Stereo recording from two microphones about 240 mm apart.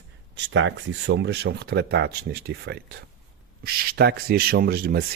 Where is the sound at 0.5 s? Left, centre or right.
Right.